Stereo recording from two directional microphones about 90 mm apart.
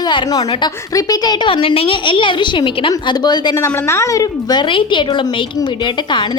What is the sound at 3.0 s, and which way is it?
Speech, 55° left (ahead or behind).